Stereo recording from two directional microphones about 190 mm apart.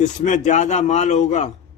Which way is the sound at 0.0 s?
40° left (ahead or behind).